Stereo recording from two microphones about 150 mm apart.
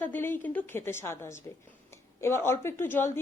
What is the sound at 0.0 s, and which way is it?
Speech, 15° left (ahead or behind).